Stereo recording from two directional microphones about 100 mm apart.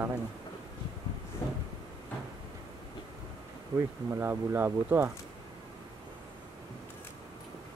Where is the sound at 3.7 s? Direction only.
25° right (ahead or behind).